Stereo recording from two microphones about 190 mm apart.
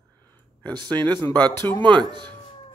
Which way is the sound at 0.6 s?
25° right (ahead or behind).